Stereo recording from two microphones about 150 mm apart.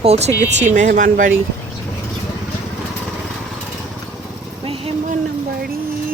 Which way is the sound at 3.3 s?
5° left (ahead or behind).